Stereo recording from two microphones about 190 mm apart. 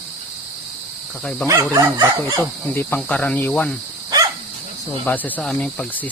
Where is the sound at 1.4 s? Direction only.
15° right (ahead or behind).